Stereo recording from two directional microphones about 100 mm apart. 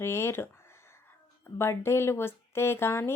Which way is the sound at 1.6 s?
25° left (ahead or behind).